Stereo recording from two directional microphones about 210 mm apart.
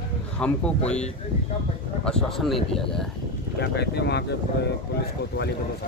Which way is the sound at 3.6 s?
55° left (ahead or behind).